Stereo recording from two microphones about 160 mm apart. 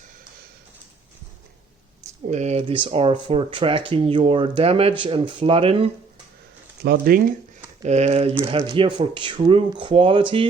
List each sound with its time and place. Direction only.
2.3 s speech: 45° right (ahead or behind)
6.8 s speech: 75° right (ahead or behind)
7.8 s speech: 45° right (ahead or behind)
8.6 s speech: 30° right (ahead or behind)